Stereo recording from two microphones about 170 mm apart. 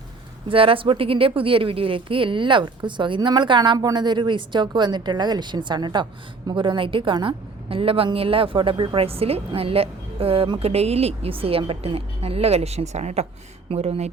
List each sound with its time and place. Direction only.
0.4 s a woman's voice: 30° right (ahead or behind)